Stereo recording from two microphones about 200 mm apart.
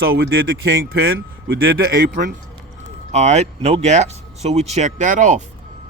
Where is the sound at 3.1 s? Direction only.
35° right (ahead or behind).